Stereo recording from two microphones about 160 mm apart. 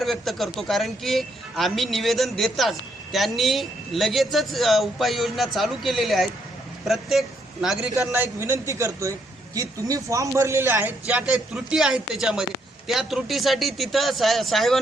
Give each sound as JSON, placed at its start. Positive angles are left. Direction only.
{"t": 0.0, "sound": "a man's voice", "side_deg": 0}
{"t": 8.1, "sound": "a man's voice", "side_deg": -15}